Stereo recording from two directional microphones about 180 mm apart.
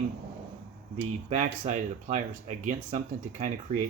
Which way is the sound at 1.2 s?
40° right (ahead or behind).